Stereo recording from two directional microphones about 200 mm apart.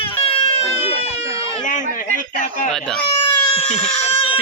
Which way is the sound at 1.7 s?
40° left (ahead or behind).